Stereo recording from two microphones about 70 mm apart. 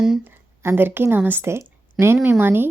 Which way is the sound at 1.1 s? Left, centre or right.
Right.